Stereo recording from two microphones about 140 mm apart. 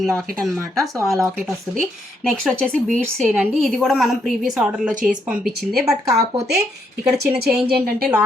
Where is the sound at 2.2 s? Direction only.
5° left (ahead or behind).